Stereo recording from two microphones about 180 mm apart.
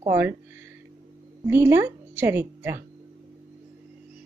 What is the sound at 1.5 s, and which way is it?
A woman's voice, 15° right (ahead or behind).